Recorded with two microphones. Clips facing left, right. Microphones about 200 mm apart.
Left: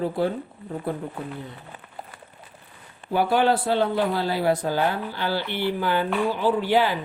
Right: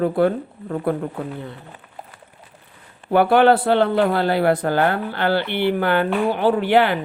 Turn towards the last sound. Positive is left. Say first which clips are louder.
# right 4 dB
turn(degrees=-65)  # may be behind; listen again after turning